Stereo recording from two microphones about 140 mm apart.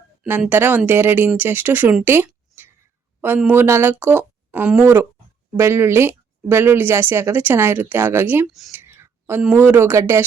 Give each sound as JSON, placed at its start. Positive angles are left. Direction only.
{"t": 0.3, "sound": "speech", "side_deg": -15}
{"t": 8.7, "sound": "a sound", "side_deg": -15}
{"t": 9.6, "sound": "speech", "side_deg": -15}